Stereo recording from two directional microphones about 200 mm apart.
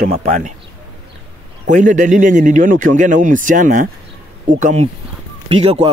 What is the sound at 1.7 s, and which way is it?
Speech, 40° right (ahead or behind).